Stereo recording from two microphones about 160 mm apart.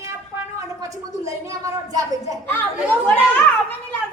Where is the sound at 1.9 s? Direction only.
20° right (ahead or behind).